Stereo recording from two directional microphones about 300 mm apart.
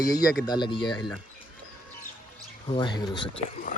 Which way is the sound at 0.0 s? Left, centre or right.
Centre.